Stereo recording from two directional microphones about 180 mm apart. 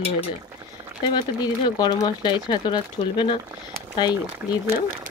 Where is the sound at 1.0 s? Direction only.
25° left (ahead or behind).